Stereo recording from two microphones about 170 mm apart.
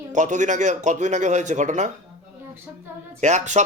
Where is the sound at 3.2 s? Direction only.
45° right (ahead or behind).